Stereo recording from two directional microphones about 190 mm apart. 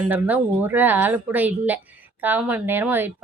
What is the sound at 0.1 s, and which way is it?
Speech, 10° right (ahead or behind).